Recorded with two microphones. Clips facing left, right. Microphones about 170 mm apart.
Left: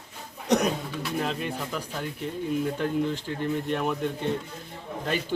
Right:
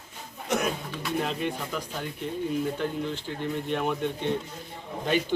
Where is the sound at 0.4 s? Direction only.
40° left (ahead or behind).